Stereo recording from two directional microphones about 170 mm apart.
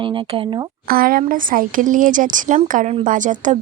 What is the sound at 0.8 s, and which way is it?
Speech, 60° right (ahead or behind).